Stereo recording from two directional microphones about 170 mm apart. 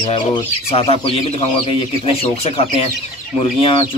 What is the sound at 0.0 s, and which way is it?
Speech, 30° left (ahead or behind).